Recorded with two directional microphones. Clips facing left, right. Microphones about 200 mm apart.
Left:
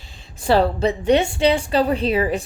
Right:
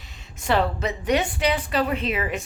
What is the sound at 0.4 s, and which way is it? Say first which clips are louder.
A woman's voice: left 6 dB; 35° left (ahead or behind).